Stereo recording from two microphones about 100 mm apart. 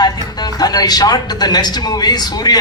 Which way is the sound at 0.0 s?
45° left (ahead or behind).